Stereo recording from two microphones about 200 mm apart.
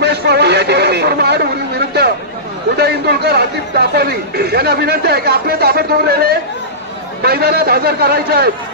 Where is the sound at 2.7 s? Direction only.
55° right (ahead or behind).